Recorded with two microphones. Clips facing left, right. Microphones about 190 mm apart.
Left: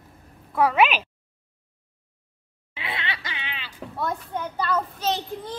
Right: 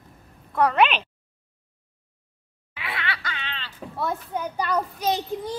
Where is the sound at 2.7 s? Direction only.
25° left (ahead or behind).